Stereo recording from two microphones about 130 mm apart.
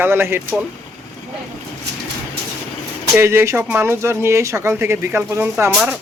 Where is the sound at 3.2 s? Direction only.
20° right (ahead or behind).